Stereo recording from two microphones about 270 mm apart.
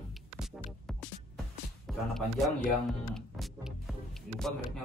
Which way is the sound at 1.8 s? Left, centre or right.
Centre.